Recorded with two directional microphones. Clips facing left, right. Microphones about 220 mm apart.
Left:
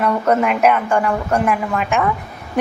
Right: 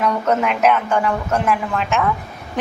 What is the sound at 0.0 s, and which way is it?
A woman's voice, 5° left (ahead or behind).